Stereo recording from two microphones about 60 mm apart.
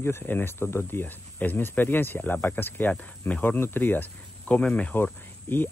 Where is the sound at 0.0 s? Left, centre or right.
Left.